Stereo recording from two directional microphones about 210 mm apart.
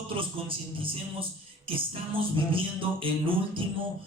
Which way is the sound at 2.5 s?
25° right (ahead or behind).